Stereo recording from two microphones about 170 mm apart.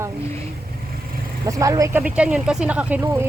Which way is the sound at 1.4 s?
20° right (ahead or behind).